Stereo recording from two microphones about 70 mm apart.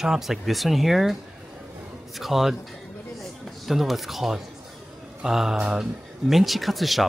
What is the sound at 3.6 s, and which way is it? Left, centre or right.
Speech, centre.